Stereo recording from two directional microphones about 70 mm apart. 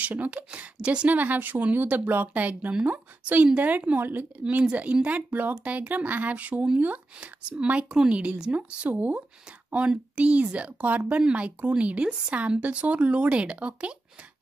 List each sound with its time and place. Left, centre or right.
0.0 s speech: right